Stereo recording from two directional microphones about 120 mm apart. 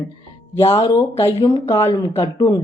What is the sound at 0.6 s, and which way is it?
Speech, 55° left (ahead or behind).